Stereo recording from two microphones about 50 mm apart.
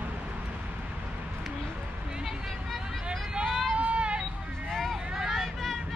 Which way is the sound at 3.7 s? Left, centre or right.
Right.